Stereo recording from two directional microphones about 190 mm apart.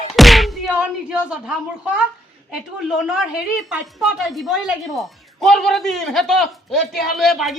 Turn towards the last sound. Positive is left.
turn(degrees=0)  # may be behind; listen again after turning